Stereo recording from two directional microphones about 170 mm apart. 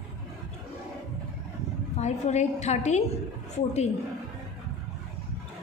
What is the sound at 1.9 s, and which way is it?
A woman's voice, 40° left (ahead or behind).